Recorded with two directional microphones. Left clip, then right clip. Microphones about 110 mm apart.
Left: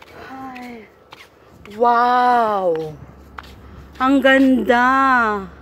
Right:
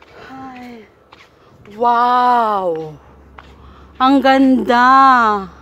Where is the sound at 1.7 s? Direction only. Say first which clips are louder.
Right 2 dB; 30° right (ahead or behind).